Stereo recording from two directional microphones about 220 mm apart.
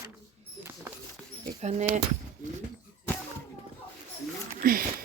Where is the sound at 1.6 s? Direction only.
30° right (ahead or behind).